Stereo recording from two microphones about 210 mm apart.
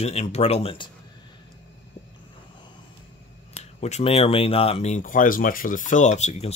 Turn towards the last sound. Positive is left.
turn(degrees=30)  # may be behind; listen again after turning